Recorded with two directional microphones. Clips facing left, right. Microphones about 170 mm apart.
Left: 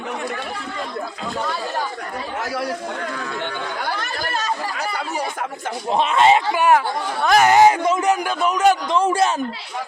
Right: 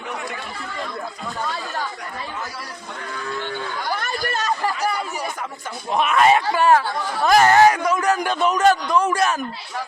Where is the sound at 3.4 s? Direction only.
65° left (ahead or behind).